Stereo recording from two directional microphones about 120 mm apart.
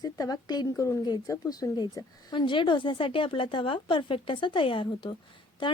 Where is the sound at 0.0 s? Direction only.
30° left (ahead or behind).